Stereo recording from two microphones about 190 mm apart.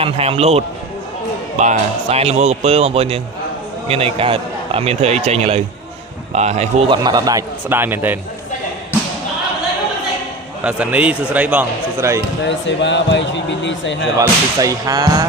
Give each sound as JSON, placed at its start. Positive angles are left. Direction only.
{"t": 0.0, "sound": "a man's voice", "side_deg": -30}
{"t": 10.6, "sound": "speech", "side_deg": -5}
{"t": 12.5, "sound": "a man's voice", "side_deg": 70}
{"t": 14.2, "sound": "a man's voice", "side_deg": -15}